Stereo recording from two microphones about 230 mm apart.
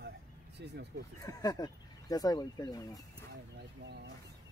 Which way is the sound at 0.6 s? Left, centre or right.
Right.